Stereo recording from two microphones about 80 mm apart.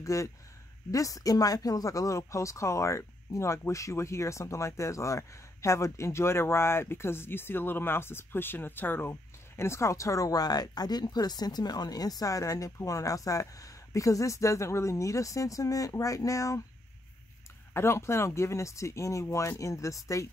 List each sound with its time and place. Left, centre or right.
0.0 s speech: left
17.7 s speech: left